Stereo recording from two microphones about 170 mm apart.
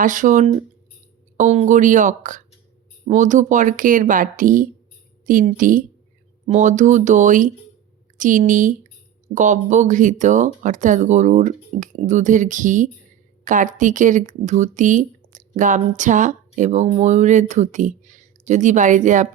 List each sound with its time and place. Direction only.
0.0 s speech: 50° right (ahead or behind)